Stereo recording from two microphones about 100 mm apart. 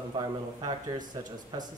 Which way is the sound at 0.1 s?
45° right (ahead or behind).